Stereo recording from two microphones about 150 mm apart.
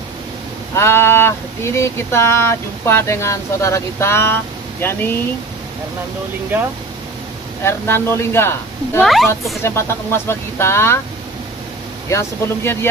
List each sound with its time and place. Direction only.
0.7 s speech: 15° left (ahead or behind)
7.6 s speech: 15° left (ahead or behind)
9.0 s speech: centre (ahead or behind)
9.6 s speech: 15° left (ahead or behind)
12.1 s speech: 20° left (ahead or behind)